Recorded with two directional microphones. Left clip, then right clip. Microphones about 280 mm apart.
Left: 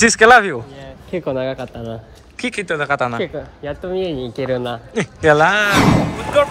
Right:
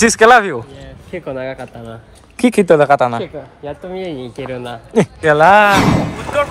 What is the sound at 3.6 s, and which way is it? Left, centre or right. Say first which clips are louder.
Speech: left 3 dB; left.